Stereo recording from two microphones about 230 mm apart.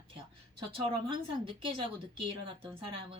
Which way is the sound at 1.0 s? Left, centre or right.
Right.